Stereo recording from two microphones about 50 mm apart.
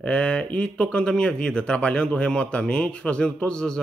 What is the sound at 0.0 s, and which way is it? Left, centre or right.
A man's voice, left.